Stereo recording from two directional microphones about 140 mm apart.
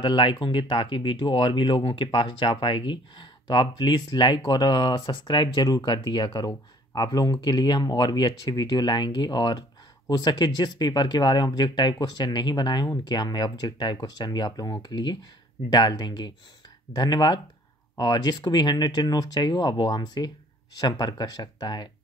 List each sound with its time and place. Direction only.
0.0 s speech: 35° left (ahead or behind)